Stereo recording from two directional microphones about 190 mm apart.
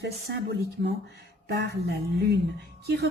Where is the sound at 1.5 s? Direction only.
60° right (ahead or behind).